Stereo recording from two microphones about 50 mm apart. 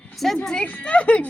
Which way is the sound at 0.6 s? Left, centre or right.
Left.